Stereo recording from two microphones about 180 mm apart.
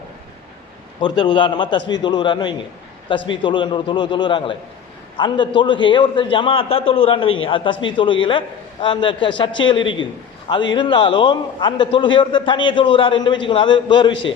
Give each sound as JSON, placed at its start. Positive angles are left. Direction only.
{"t": 1.0, "sound": "a man's voice", "side_deg": 25}